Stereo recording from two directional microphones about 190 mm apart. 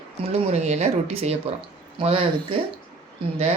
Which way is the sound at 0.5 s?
35° right (ahead or behind).